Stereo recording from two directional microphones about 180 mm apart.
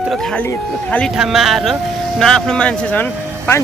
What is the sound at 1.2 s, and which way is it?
Speech, centre (ahead or behind).